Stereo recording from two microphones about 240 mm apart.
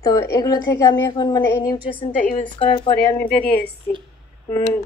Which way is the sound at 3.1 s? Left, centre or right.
Centre.